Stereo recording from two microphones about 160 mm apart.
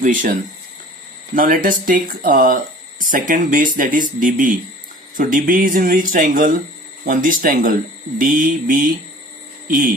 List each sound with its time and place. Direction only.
0.0 s speech: 55° right (ahead or behind)
1.4 s speech: 60° right (ahead or behind)